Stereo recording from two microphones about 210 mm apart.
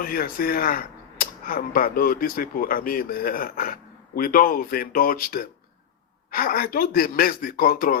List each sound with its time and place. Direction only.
0.0 s speech: 45° left (ahead or behind)